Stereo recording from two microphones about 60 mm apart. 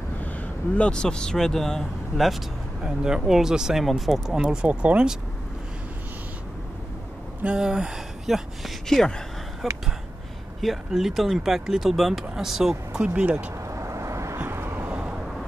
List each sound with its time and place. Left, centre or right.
0.2 s speech: left; by 2.3 s centre
2.8 s speech: centre
4.5 s speech: centre
7.4 s speech: centre
8.8 s speech: centre
10.9 s speech: centre
13.0 s speech: right
13.7 s vehicle: right
14.5 s a sound: right